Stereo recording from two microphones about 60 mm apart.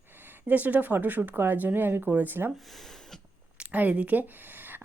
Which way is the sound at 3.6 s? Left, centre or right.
Right.